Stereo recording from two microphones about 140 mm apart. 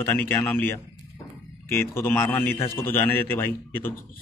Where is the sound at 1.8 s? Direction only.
15° left (ahead or behind).